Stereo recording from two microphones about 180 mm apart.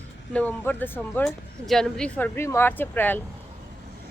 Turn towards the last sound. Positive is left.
turn(degrees=10)  # may be behind; listen again after turning